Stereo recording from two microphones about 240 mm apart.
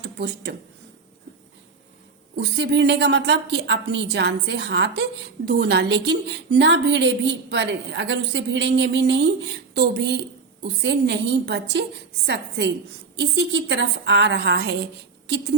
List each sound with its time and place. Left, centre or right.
0.0 s speech: right
2.3 s a woman's voice: right